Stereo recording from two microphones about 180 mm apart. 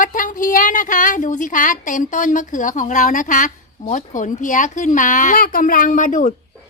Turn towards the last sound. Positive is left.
turn(degrees=45)  # may be behind; listen again after turning